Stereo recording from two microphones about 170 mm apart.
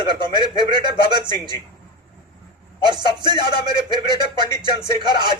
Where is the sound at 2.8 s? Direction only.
25° right (ahead or behind).